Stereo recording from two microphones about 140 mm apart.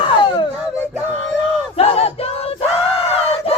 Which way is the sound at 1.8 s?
45° left (ahead or behind).